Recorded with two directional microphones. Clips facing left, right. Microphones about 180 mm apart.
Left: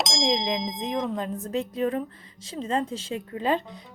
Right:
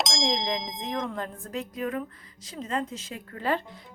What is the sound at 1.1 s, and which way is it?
A woman's voice, 20° left (ahead or behind).